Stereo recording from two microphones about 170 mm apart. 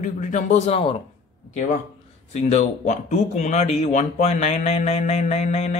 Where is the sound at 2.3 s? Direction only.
40° left (ahead or behind).